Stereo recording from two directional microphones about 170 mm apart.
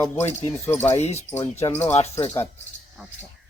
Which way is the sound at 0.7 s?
15° left (ahead or behind).